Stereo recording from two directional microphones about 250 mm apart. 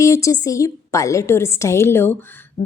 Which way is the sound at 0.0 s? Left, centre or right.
Centre.